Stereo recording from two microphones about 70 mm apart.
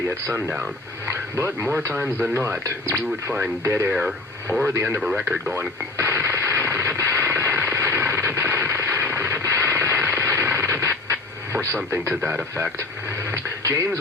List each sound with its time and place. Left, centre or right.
0.4 s speech: centre
1.0 s speech: right
3.6 s speech: right
5.1 s speech: centre
5.5 s radio: right
13.3 s radio: right